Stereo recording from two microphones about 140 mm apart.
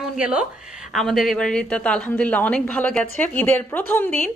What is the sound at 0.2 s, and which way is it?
A woman's voice, 10° right (ahead or behind).